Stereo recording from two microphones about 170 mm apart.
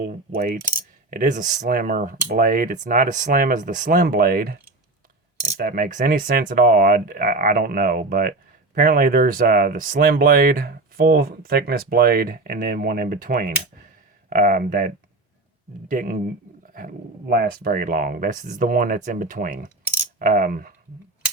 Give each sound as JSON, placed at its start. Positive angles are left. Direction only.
{"t": 0.3, "sound": "coin", "side_deg": -55}
{"t": 5.5, "sound": "speech", "side_deg": -55}
{"t": 16.7, "sound": "coin", "side_deg": -60}